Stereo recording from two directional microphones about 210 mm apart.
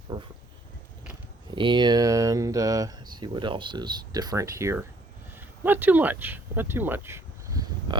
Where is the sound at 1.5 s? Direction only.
20° right (ahead or behind).